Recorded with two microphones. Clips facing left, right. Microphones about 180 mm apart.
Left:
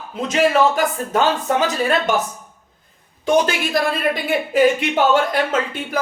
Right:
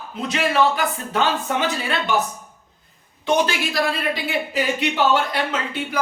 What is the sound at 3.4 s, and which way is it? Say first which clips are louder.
Speech: left 3 dB; 50° left (ahead or behind).